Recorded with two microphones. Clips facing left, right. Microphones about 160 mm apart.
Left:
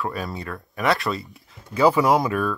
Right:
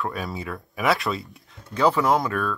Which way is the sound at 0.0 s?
Centre (ahead or behind).